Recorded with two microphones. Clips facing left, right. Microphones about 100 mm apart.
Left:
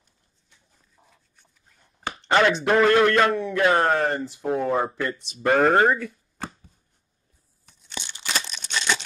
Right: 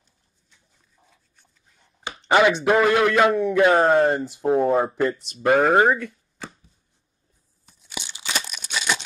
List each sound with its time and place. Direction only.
2.2 s speech: 10° right (ahead or behind)
3.3 s speech: 15° right (ahead or behind)
5.2 s speech: centre (ahead or behind)
7.6 s tearing: 10° right (ahead or behind)